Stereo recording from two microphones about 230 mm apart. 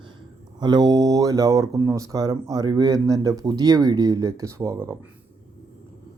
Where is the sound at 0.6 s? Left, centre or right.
Centre.